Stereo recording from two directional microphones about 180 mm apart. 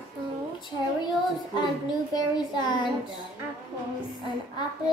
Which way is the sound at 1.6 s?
25° left (ahead or behind).